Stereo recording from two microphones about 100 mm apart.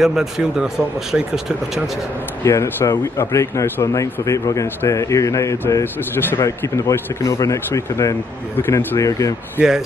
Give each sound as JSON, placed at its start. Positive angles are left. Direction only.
{"t": 0.0, "sound": "speech", "side_deg": -5}
{"t": 2.4, "sound": "a man's voice", "side_deg": 30}